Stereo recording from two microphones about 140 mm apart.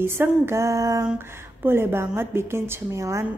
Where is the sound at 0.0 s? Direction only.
15° right (ahead or behind).